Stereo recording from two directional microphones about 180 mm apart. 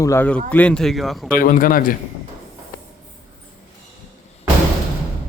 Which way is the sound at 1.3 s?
50° left (ahead or behind).